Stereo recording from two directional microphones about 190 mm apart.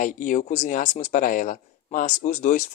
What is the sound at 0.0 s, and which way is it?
Speech, 45° left (ahead or behind).